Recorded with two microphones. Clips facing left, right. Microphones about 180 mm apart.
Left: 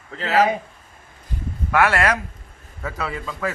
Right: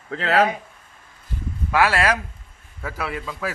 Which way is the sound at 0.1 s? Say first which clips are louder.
Even; 65° right (ahead or behind).